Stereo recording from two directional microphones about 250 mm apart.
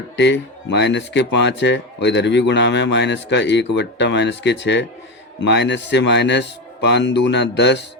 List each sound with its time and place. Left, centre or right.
0.2 s speech: left